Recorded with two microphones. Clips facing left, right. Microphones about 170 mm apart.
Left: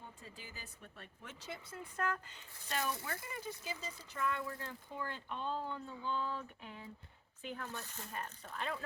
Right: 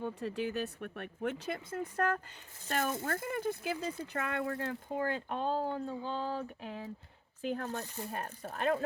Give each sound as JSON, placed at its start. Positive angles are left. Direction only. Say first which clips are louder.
{"t": 0.0, "sound": "speech", "louder": "right 18 dB", "side_deg": -70}
{"t": 6.6, "sound": "speech", "louder": "right 8 dB", "side_deg": -80}
{"t": 7.4, "sound": "speech", "louder": "right 9 dB", "side_deg": -45}